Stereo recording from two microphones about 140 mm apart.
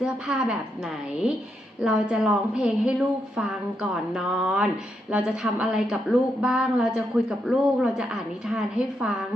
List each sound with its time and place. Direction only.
0.0 s a woman's voice: 5° right (ahead or behind)
1.8 s a woman's voice: 5° right (ahead or behind)